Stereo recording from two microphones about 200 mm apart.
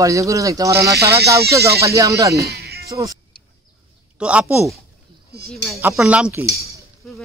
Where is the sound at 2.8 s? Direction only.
15° right (ahead or behind).